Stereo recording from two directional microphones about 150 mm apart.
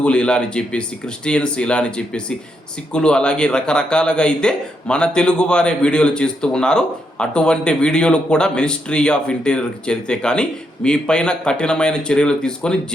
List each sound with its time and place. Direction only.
0.0 s speech: 5° left (ahead or behind)